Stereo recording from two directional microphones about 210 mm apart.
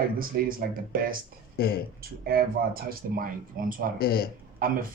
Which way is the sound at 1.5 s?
45° left (ahead or behind).